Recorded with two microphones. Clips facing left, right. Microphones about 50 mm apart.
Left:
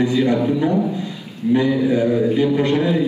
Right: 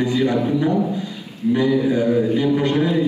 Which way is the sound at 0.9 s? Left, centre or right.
Left.